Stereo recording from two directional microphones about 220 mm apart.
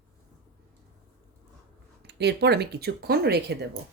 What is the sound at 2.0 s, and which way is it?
Speech, 50° right (ahead or behind).